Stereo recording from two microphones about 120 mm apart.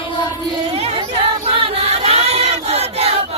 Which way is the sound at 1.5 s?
60° right (ahead or behind).